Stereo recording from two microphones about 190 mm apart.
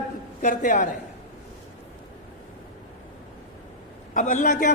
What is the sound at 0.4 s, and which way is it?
Speech, 45° left (ahead or behind).